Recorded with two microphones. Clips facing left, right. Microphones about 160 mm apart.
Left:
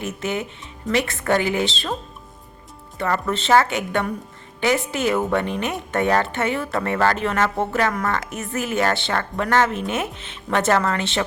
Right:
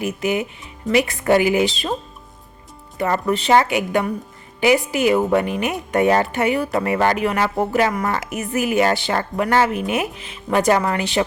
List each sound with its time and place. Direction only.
0.2 s speech: 15° right (ahead or behind)
3.0 s speech: 15° right (ahead or behind)